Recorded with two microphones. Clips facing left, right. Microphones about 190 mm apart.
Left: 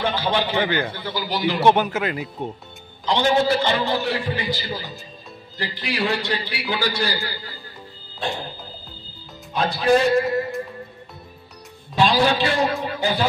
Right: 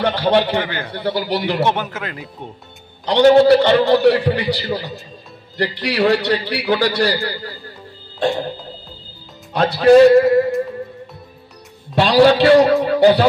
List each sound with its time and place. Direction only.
0.0 s speech: 65° right (ahead or behind)
1.6 s speech: 15° left (ahead or behind)
3.1 s a man's voice: 65° right (ahead or behind)
9.5 s speech: 65° right (ahead or behind)
11.9 s a man's voice: 65° right (ahead or behind)
12.8 s music: 70° right (ahead or behind)